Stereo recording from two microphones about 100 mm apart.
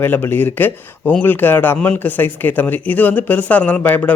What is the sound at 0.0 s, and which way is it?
Speech, 20° left (ahead or behind).